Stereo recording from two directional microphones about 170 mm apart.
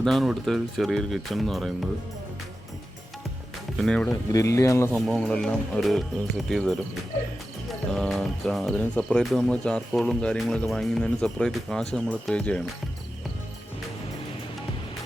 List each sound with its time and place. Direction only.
0.0 s speech: centre (ahead or behind)
3.8 s speech: 5° left (ahead or behind)
4.1 s speech: 20° left (ahead or behind)
4.9 s speech: centre (ahead or behind)